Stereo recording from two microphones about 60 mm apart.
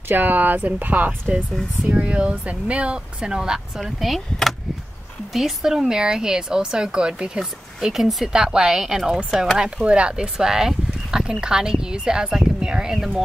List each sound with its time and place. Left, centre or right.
0.1 s speech: right; by 3.8 s centre
3.8 s speech: centre